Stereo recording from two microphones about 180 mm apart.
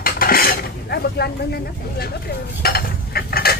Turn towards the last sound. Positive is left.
turn(degrees=60)  # may be behind; listen again after turning